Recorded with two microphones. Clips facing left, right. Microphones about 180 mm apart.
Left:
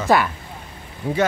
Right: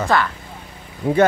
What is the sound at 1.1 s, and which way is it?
Speech, 60° right (ahead or behind).